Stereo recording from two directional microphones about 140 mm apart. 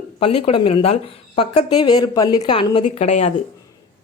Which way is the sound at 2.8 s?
50° left (ahead or behind).